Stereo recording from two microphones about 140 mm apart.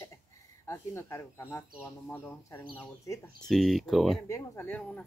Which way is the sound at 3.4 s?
Centre (ahead or behind).